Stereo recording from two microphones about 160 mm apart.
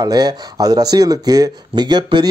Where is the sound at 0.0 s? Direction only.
25° right (ahead or behind).